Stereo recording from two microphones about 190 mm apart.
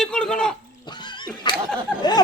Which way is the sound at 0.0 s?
5° left (ahead or behind).